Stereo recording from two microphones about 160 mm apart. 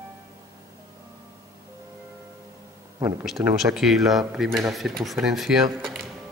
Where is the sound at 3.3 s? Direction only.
5° right (ahead or behind).